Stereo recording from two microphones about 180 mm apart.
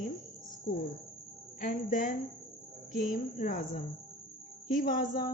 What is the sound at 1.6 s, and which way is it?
Speech, 45° left (ahead or behind).